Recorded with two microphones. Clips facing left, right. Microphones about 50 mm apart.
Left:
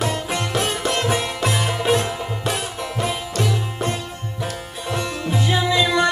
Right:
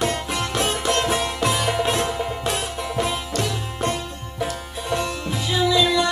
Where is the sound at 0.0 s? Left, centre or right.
Centre.